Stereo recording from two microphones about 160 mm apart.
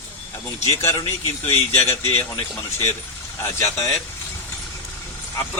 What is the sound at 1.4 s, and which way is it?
Speech, 40° left (ahead or behind).